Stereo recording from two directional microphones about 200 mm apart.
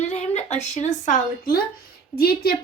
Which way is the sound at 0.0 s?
35° left (ahead or behind).